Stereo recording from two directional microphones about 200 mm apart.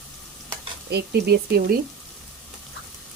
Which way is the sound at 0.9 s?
55° right (ahead or behind).